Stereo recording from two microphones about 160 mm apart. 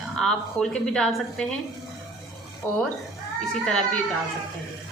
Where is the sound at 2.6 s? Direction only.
15° left (ahead or behind).